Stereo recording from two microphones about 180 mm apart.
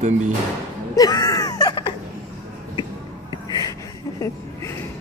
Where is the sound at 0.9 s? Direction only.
20° left (ahead or behind).